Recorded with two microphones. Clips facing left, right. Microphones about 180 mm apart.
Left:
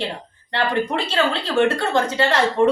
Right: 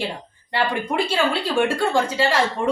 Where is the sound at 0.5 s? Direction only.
10° right (ahead or behind).